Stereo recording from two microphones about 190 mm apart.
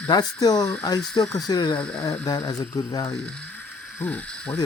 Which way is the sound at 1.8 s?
5° left (ahead or behind).